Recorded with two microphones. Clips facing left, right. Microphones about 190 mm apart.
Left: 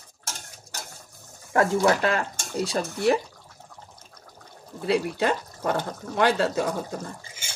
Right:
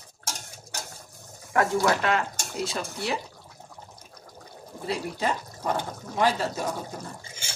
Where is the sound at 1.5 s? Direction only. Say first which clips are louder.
Left 2 dB; 35° left (ahead or behind).